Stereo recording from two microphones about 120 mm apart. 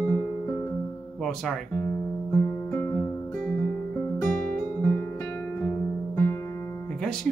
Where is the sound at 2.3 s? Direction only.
20° left (ahead or behind).